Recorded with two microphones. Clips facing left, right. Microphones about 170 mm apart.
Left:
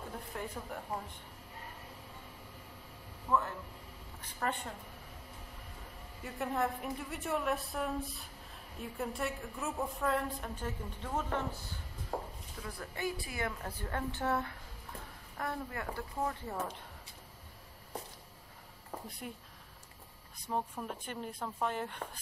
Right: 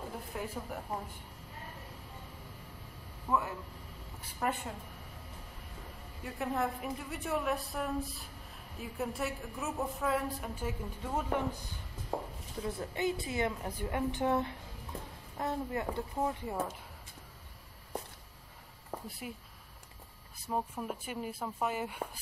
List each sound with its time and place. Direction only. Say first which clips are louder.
0.3 s a woman's voice: right 2 dB; 5° right (ahead or behind)
3.3 s speech: even; 10° right (ahead or behind)
6.2 s a woman's voice: even; centre (ahead or behind)
12.6 s a woman's voice: right 5 dB; 20° right (ahead or behind)
19.0 s a woman's voice: even; 5° right (ahead or behind)
20.4 s speech: right 2 dB; 5° right (ahead or behind)